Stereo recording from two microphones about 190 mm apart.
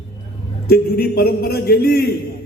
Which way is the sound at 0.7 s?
55° left (ahead or behind).